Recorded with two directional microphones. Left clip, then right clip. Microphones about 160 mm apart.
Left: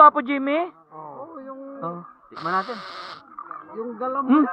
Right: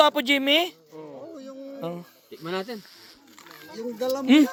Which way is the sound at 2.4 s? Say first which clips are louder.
Left 7 dB; 40° left (ahead or behind).